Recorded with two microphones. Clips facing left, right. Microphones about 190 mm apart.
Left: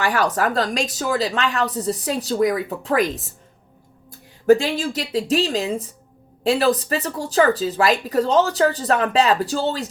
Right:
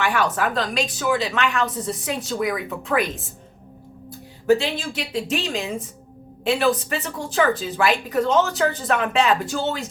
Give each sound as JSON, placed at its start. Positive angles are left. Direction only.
{"t": 0.0, "sound": "a woman's voice", "side_deg": 40}
{"t": 4.4, "sound": "a woman's voice", "side_deg": 45}